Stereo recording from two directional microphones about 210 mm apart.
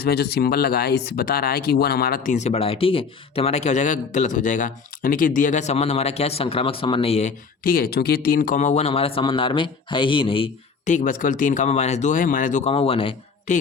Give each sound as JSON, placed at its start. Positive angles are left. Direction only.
{"t": 0.0, "sound": "speech", "side_deg": 50}